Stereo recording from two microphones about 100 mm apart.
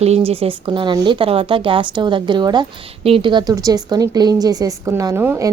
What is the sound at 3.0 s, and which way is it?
Speech, 60° right (ahead or behind).